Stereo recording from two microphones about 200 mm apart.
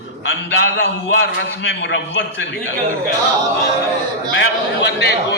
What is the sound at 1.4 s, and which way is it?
Speech, 65° left (ahead or behind).